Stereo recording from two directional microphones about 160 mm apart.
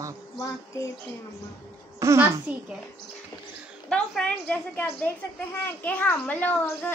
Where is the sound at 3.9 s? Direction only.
5° left (ahead or behind).